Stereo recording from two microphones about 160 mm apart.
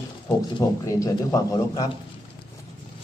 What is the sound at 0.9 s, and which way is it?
Speech, 20° left (ahead or behind).